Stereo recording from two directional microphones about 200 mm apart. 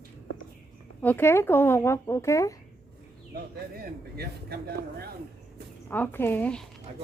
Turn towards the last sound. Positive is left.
turn(degrees=5)  # may be behind; listen again after turning